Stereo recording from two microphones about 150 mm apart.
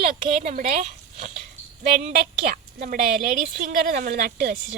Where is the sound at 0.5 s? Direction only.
65° right (ahead or behind).